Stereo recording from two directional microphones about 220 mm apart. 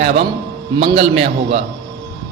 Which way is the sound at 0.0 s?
30° right (ahead or behind).